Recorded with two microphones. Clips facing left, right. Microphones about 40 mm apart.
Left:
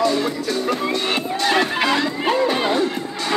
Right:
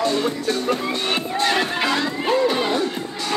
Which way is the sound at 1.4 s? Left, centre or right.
Centre.